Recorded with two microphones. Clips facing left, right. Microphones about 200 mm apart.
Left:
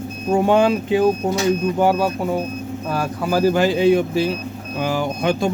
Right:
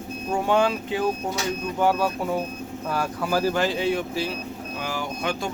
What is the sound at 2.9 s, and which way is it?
Speech, 5° left (ahead or behind).